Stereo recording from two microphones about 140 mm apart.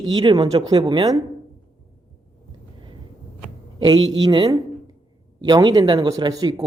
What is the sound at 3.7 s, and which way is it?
A woman's voice, 35° right (ahead or behind).